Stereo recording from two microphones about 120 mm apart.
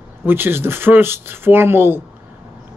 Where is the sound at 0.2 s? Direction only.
20° right (ahead or behind).